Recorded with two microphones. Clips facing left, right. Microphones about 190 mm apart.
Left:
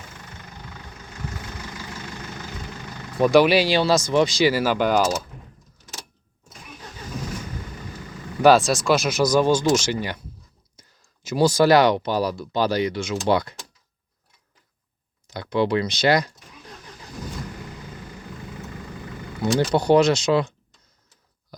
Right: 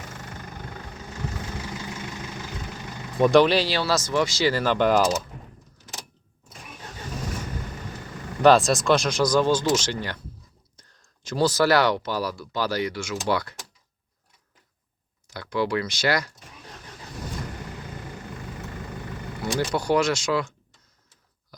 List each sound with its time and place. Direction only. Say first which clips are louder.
3.2 s speech: left 1 dB; 5° left (ahead or behind)
8.4 s speech: left 1 dB; 5° left (ahead or behind); by 13.6 s 20° left (ahead or behind)
15.3 s speech: left 4 dB; 20° left (ahead or behind)
19.5 s speech: left 5 dB; 25° left (ahead or behind)